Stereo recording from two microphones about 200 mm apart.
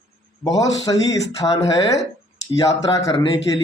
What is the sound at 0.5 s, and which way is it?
Speech, 15° left (ahead or behind).